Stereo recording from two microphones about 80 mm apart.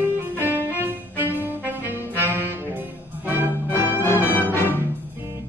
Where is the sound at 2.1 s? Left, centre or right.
Right.